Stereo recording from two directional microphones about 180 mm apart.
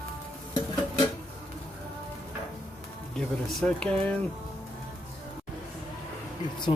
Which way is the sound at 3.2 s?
5° left (ahead or behind).